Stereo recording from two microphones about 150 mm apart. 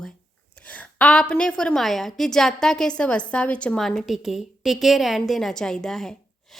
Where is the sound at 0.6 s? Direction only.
10° left (ahead or behind).